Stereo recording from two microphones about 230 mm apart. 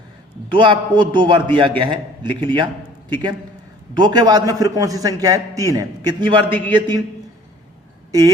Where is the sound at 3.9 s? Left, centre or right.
Centre.